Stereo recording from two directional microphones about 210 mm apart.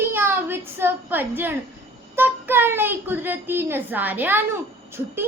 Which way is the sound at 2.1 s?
10° right (ahead or behind).